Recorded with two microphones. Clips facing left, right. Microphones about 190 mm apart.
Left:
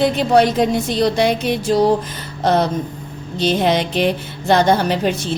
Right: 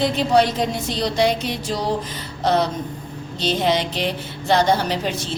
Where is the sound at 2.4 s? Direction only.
50° left (ahead or behind).